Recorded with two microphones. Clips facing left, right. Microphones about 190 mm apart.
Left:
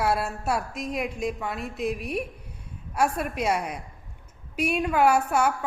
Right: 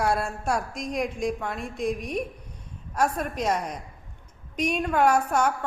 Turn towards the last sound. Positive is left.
turn(degrees=5)  # may be behind; listen again after turning